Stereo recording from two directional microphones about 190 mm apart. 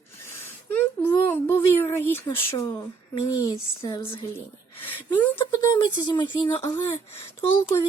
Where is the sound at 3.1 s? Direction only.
25° left (ahead or behind).